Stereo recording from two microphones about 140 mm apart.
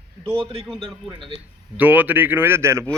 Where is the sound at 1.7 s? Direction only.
10° right (ahead or behind).